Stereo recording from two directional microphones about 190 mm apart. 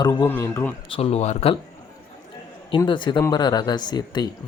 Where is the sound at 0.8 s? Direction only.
30° left (ahead or behind).